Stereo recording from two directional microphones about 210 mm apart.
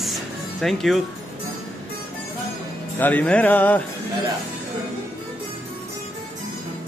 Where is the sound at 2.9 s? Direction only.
10° left (ahead or behind).